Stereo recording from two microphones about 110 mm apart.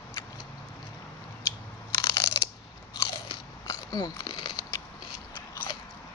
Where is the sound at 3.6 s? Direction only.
35° left (ahead or behind).